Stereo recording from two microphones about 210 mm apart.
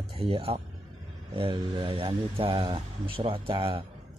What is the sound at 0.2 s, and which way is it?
Speech, 30° right (ahead or behind).